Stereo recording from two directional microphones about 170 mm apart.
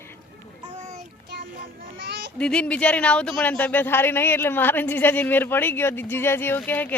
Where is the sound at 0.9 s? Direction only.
45° right (ahead or behind).